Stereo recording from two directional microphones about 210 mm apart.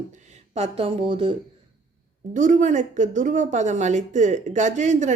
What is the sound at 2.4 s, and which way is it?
Speech, 35° right (ahead or behind).